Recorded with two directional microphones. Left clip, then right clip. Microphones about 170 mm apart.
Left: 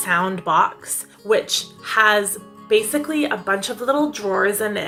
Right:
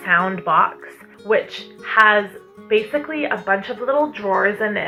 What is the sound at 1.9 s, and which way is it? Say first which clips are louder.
Speech: right 2 dB; 45° left (ahead or behind).